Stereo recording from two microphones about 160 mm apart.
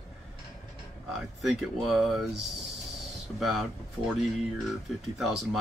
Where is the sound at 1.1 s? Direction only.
Centre (ahead or behind).